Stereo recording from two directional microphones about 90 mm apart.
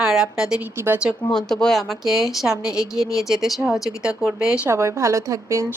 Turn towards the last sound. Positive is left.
turn(degrees=-35)  # may be behind; listen again after turning